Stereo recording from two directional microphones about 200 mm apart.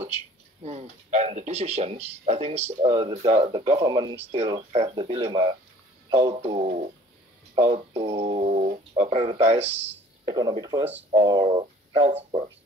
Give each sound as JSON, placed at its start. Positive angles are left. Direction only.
{"t": 0.7, "sound": "speech", "side_deg": -35}
{"t": 6.4, "sound": "speech", "side_deg": -35}
{"t": 7.5, "sound": "speech", "side_deg": -25}